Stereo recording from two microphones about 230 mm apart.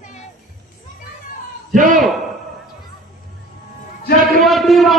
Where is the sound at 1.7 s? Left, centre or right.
Right.